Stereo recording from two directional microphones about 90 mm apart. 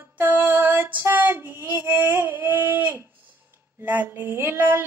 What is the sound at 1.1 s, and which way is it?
Child singing, 20° right (ahead or behind).